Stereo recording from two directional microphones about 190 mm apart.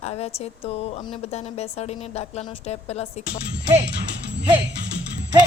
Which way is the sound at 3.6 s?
30° right (ahead or behind).